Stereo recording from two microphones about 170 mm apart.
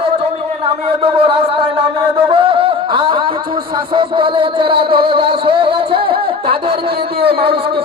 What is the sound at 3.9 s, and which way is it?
Music, 30° right (ahead or behind).